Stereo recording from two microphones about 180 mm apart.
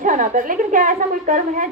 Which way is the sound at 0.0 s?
45° right (ahead or behind).